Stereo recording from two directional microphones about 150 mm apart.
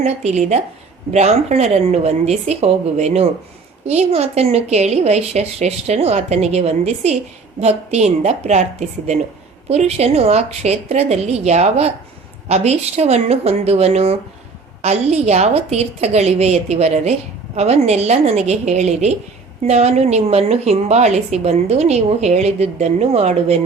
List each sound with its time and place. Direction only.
0.3 s a woman's voice: 50° right (ahead or behind)
9.6 s a woman's voice: 45° right (ahead or behind)